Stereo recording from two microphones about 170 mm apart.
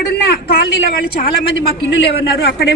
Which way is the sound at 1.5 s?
90° left.